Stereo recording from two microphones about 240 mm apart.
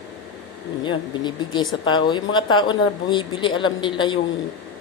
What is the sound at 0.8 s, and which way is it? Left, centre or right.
Speech, centre.